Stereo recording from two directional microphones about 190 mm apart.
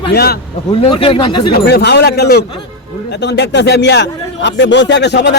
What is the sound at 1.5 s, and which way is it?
A man's voice, 60° left (ahead or behind).